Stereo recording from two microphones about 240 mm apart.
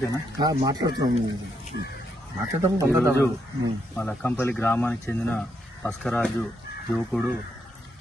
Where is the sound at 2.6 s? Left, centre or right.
Centre.